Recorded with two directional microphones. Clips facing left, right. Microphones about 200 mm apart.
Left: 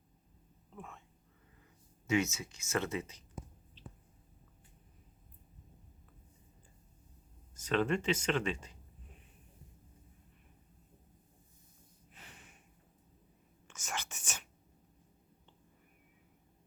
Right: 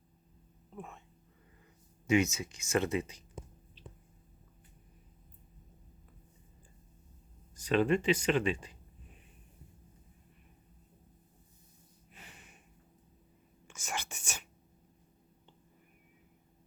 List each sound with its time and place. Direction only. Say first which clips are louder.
0.8 s speech: right 3 dB; 20° right (ahead or behind)
2.0 s speech: right 4 dB; 15° right (ahead or behind)
7.6 s speech: right 4 dB; 15° right (ahead or behind)
13.7 s whispering: right 2 dB; 10° right (ahead or behind)